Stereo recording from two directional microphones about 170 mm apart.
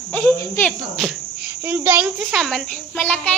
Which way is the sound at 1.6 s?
10° right (ahead or behind).